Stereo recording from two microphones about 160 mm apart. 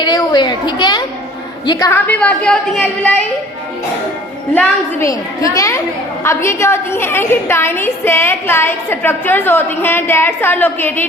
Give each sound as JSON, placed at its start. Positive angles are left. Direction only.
{"t": 0.0, "sound": "a woman's voice", "side_deg": 25}
{"t": 1.9, "sound": "a woman's voice", "side_deg": 10}
{"t": 4.5, "sound": "a woman's voice", "side_deg": 20}